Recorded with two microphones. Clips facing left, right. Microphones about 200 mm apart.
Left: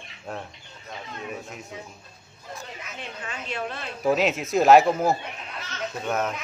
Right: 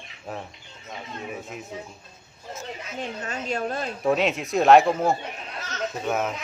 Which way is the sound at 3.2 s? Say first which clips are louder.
Right 3 dB; 40° right (ahead or behind).